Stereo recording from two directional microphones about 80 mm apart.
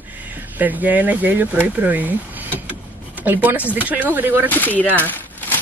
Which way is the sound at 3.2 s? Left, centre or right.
Right.